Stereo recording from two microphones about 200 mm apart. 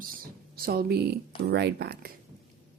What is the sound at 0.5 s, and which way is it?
Speech, 45° right (ahead or behind).